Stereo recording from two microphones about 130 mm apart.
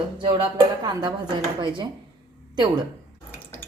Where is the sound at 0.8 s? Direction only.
35° right (ahead or behind).